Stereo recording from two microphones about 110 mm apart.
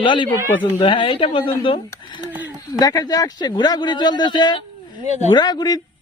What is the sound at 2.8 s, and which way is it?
Speech, 35° left (ahead or behind).